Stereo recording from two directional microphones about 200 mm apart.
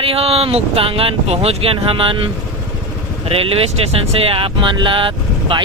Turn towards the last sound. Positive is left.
turn(degrees=-25)  # may be behind; listen again after turning